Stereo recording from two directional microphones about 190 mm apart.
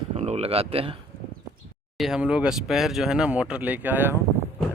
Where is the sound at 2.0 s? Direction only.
5° right (ahead or behind).